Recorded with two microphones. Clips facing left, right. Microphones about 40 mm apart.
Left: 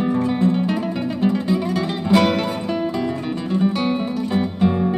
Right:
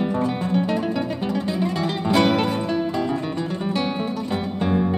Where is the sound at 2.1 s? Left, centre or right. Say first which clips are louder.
Left 2 dB; centre.